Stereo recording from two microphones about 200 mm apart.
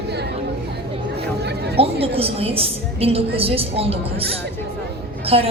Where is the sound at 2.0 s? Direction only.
30° right (ahead or behind).